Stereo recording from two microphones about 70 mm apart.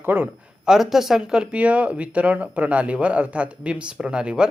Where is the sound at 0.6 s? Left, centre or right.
Centre.